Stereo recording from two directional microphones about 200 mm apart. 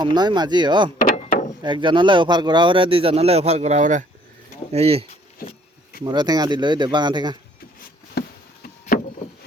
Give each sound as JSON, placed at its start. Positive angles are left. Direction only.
{"t": 0.0, "sound": "speech", "side_deg": -20}
{"t": 0.9, "sound": "mechanisms", "side_deg": 40}
{"t": 1.6, "sound": "speech", "side_deg": -25}
{"t": 6.1, "sound": "speech", "side_deg": -20}
{"t": 8.9, "sound": "vehicle", "side_deg": 45}